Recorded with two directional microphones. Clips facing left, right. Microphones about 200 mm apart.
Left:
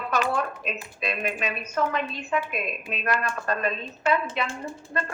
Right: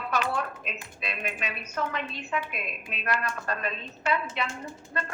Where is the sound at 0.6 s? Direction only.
45° left (ahead or behind).